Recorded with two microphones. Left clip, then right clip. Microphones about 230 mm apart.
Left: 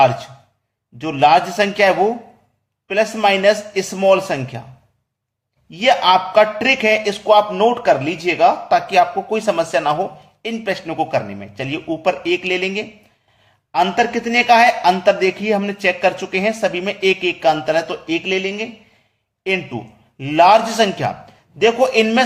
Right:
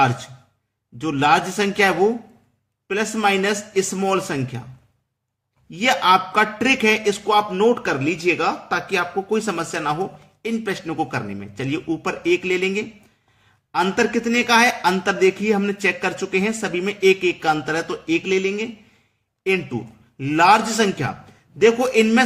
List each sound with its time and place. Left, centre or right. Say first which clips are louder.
1.0 s a man's voice: left 5 dB; right
5.7 s a man's voice: left 3 dB; right